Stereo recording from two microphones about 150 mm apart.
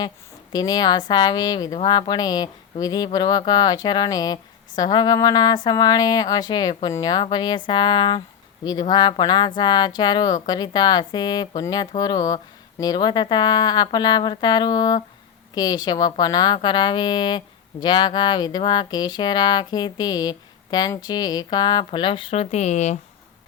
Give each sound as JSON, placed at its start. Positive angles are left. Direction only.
{"t": 0.5, "sound": "a woman's voice", "side_deg": 25}